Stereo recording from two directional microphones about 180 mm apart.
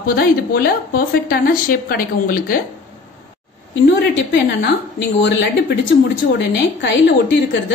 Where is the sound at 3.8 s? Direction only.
80° left.